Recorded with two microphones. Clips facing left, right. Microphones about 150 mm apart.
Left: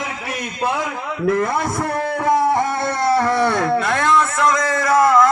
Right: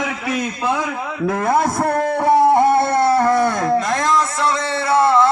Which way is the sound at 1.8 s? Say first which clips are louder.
Right 3 dB; 35° right (ahead or behind).